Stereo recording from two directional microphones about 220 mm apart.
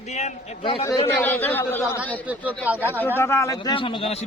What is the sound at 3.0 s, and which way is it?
A man's voice, 10° left (ahead or behind).